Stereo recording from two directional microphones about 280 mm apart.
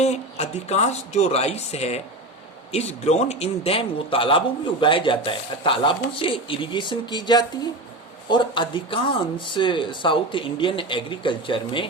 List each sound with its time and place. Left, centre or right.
0.0 s speech: left